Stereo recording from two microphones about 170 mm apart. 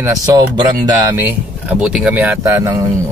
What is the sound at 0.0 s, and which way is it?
Speech, 20° right (ahead or behind).